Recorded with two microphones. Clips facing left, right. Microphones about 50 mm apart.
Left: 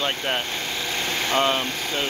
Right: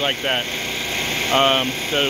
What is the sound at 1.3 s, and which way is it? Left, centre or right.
Speech, right.